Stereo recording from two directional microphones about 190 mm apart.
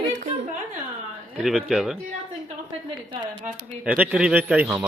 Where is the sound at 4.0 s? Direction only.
5° right (ahead or behind).